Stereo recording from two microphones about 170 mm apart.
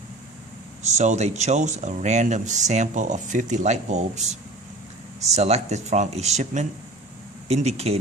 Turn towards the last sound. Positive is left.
turn(degrees=-40)  # may be behind; listen again after turning